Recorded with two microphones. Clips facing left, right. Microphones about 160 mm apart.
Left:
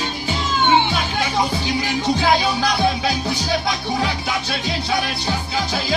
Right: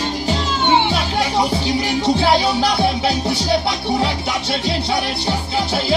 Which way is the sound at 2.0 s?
30° right (ahead or behind).